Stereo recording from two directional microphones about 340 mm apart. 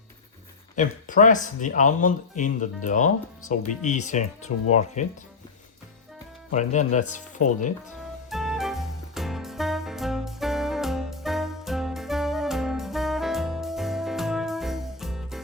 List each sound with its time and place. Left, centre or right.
0.8 s speech: left
6.5 s speech: left
8.3 s music: centre